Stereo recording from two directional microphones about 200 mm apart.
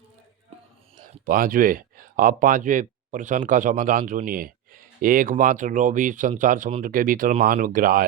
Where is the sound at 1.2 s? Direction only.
45° right (ahead or behind).